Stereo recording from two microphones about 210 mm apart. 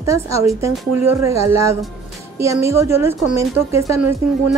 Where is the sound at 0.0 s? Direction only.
15° right (ahead or behind).